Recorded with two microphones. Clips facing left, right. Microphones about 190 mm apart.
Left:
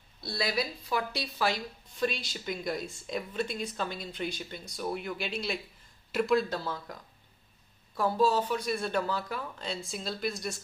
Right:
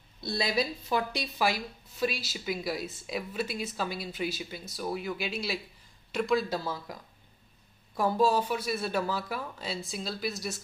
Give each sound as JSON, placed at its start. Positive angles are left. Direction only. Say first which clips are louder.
{"t": 0.2, "sound": "speech", "louder": "right 2 dB", "side_deg": -20}
{"t": 1.4, "sound": "speech", "louder": "right 1 dB", "side_deg": -5}
{"t": 6.5, "sound": "speech", "louder": "right 2 dB", "side_deg": -10}